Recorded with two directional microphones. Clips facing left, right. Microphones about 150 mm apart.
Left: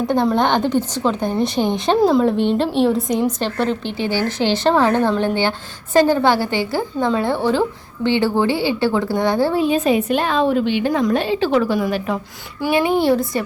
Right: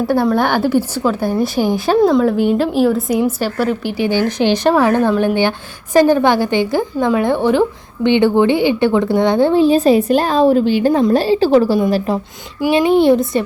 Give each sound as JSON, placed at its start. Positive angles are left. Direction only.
{"t": 0.4, "sound": "speech", "side_deg": -5}
{"t": 9.6, "sound": "a woman's voice", "side_deg": -35}
{"t": 12.5, "sound": "speech", "side_deg": -15}